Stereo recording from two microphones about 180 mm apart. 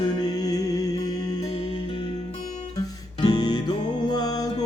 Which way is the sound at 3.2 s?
20° left (ahead or behind).